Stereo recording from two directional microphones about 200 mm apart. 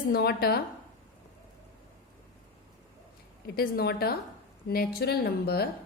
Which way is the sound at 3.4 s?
50° left (ahead or behind).